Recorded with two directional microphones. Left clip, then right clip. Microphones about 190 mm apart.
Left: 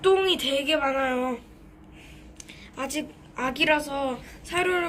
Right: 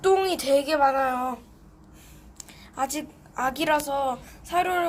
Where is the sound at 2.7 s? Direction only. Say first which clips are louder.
Right 3 dB; 45° right (ahead or behind).